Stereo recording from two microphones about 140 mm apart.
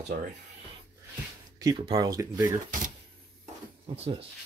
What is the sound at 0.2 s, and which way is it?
Speech, 60° right (ahead or behind).